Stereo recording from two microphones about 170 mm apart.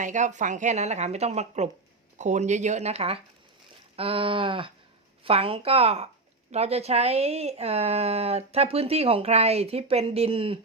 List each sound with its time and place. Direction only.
0.0 s a woman's voice: 45° right (ahead or behind)